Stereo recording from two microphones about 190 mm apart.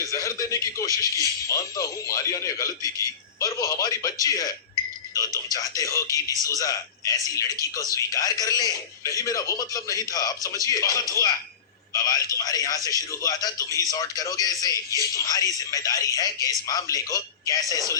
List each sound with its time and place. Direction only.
0.1 s a man's voice: 15° left (ahead or behind)